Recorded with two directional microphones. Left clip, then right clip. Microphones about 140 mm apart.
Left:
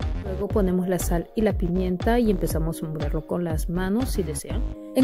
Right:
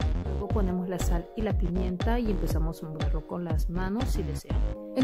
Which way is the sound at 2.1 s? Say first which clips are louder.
Left 10 dB; 50° left (ahead or behind).